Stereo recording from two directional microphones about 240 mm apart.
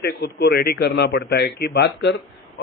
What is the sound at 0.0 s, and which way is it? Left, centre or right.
Speech, left.